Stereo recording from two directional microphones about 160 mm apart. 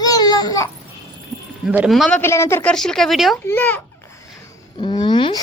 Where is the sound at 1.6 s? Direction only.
5° right (ahead or behind); by 2.7 s 15° left (ahead or behind).